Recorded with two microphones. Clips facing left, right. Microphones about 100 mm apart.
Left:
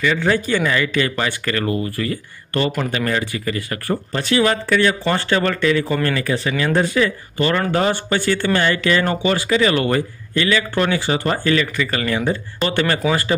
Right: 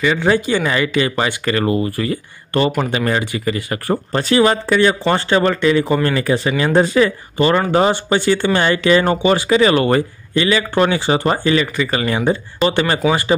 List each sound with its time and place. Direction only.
0.0 s speech: 20° right (ahead or behind)
3.9 s speech: 35° right (ahead or behind); by 13.3 s 20° right (ahead or behind)